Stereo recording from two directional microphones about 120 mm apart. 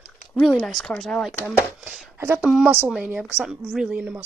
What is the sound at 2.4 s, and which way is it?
A woman's voice, 5° right (ahead or behind).